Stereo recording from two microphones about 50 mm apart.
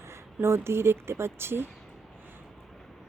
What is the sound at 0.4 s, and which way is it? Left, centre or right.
Speech, right.